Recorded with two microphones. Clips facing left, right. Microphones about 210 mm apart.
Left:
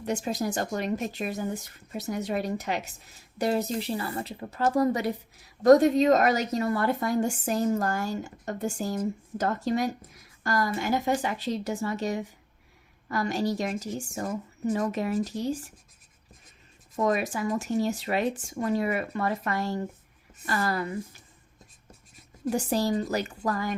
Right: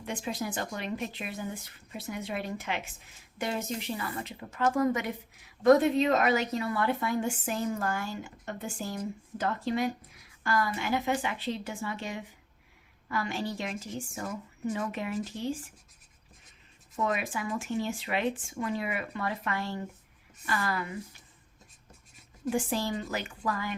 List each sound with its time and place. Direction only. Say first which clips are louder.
0.0 s a woman's voice: left 5 dB; 45° left (ahead or behind)
17.0 s a woman's voice: left 5 dB; 40° left (ahead or behind)
22.4 s a woman's voice: left 4 dB; 40° left (ahead or behind)